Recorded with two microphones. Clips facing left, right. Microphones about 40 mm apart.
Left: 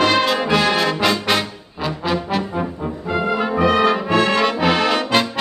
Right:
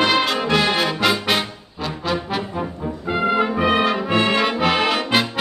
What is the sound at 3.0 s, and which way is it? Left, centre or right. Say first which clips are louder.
Brass instrument: right 1 dB; centre.